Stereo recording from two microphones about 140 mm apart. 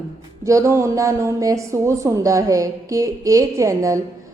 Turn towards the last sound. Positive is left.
turn(degrees=-20)  # may be behind; listen again after turning